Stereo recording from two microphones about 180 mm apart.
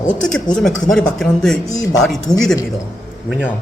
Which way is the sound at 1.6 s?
20° left (ahead or behind).